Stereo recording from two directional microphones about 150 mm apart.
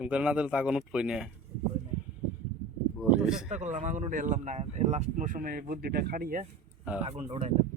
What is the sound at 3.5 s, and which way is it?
Speech, 55° right (ahead or behind).